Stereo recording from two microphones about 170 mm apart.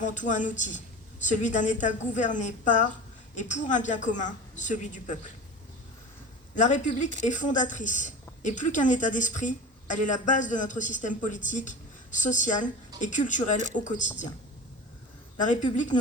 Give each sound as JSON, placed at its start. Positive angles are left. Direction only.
{"t": 0.0, "sound": "a woman's voice", "side_deg": 45}
{"t": 6.6, "sound": "a woman's voice", "side_deg": 45}
{"t": 15.4, "sound": "a woman's voice", "side_deg": 45}